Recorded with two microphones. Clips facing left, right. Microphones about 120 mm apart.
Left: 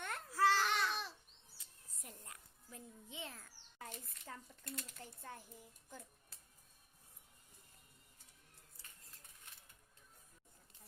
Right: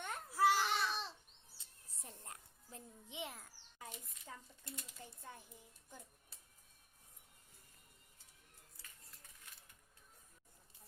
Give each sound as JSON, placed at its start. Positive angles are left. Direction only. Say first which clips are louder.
{"t": 0.0, "sound": "babbling", "louder": "right 1 dB", "side_deg": -15}
{"t": 1.5, "sound": "a sound", "louder": "even", "side_deg": -30}
{"t": 4.6, "sound": "speech", "louder": "left 7 dB", "side_deg": 65}
{"t": 4.9, "sound": "a child's voice", "louder": "left 2 dB", "side_deg": -15}